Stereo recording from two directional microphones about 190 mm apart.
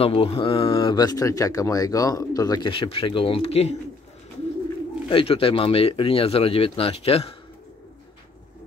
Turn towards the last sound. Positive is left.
turn(degrees=30)  # may be behind; listen again after turning